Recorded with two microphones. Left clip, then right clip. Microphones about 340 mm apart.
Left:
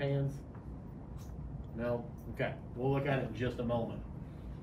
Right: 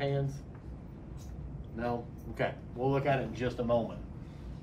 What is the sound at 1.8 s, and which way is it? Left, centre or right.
Speech, centre.